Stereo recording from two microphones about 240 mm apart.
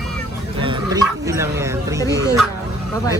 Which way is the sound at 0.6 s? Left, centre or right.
Centre.